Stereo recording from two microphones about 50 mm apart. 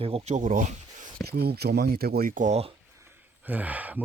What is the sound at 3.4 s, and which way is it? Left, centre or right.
Speech, right.